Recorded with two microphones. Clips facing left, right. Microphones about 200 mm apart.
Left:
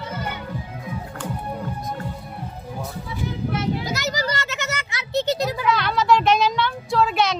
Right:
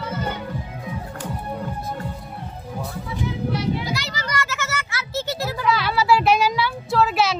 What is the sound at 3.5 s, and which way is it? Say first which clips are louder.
Children playing: left 1 dB; 45° left (ahead or behind).